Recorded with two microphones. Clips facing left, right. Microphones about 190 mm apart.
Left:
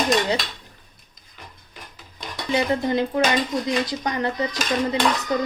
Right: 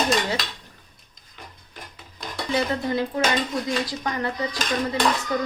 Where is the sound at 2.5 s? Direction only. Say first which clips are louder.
Left 3 dB; 20° left (ahead or behind).